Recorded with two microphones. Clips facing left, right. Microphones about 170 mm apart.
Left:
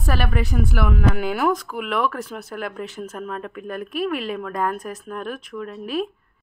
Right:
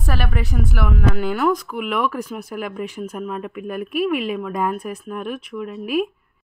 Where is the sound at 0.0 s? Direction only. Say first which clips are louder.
Left 1 dB; centre (ahead or behind).